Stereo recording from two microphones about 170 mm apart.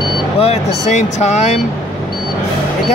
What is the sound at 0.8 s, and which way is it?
Speech, 40° left (ahead or behind).